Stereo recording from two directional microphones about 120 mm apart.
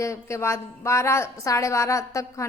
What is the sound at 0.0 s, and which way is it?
A woman's voice, 25° left (ahead or behind).